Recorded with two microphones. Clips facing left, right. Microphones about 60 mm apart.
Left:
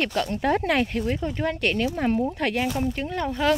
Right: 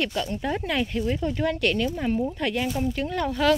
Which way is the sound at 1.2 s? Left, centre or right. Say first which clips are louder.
Right 1 dB; left.